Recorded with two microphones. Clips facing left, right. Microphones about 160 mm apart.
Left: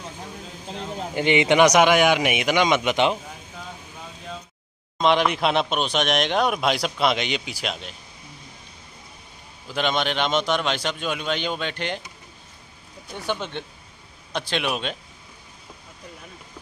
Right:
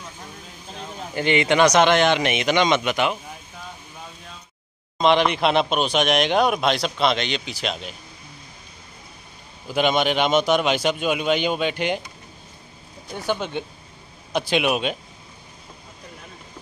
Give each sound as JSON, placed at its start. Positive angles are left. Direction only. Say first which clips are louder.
{"t": 1.1, "sound": "speech", "louder": "left 1 dB", "side_deg": 15}
{"t": 2.8, "sound": "speech", "louder": "left 2 dB", "side_deg": 15}
{"t": 4.9, "sound": "speech", "louder": "right 2 dB", "side_deg": 0}
{"t": 9.7, "sound": "a man's voice", "louder": "right 4 dB", "side_deg": -10}
{"t": 13.1, "sound": "a man's voice", "louder": "right 3 dB", "side_deg": -5}